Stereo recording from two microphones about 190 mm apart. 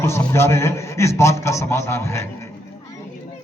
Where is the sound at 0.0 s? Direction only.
15° left (ahead or behind).